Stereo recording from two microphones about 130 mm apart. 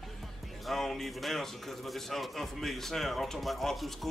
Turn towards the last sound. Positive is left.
turn(degrees=0)  # may be behind; listen again after turning